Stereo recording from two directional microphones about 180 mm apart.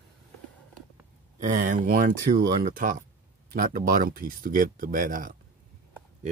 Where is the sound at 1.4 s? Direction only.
45° right (ahead or behind).